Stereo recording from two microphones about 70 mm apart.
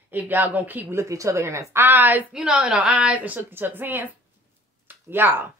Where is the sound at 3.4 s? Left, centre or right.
Right.